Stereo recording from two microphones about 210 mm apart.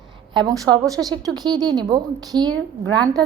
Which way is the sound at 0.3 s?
20° right (ahead or behind).